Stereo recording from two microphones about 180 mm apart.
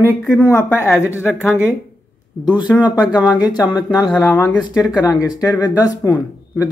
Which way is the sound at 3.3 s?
20° left (ahead or behind).